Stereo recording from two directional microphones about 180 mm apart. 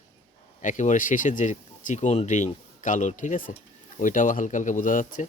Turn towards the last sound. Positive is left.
turn(degrees=45)  # may be behind; listen again after turning